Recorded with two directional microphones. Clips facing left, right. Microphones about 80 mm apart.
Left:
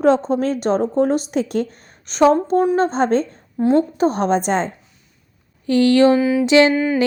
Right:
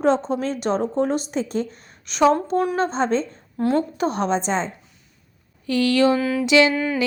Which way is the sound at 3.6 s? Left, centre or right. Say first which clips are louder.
Left 5 dB; left.